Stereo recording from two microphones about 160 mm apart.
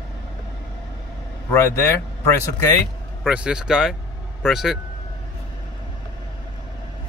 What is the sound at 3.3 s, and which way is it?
Speech, 5° right (ahead or behind).